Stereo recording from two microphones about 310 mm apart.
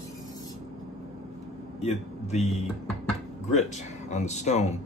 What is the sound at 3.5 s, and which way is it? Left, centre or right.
Speech, left.